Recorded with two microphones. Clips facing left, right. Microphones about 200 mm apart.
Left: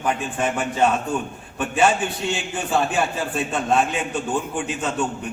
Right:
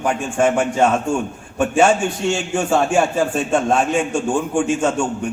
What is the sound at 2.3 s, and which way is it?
A man's voice, 45° right (ahead or behind).